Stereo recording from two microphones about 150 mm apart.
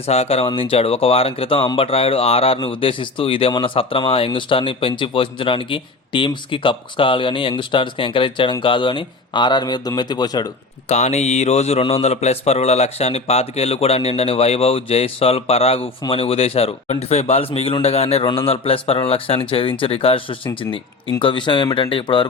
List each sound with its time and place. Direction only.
0.1 s speech: 45° left (ahead or behind); by 10.5 s 25° left (ahead or behind)
10.8 s speech: 50° left (ahead or behind); by 22.3 s 35° left (ahead or behind)